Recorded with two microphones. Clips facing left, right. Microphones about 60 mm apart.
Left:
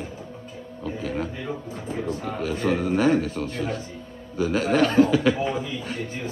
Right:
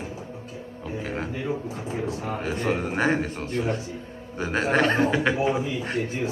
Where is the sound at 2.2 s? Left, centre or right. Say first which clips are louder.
Left 2 dB; right.